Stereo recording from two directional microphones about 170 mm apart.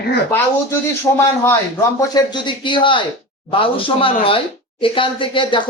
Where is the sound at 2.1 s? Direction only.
25° left (ahead or behind).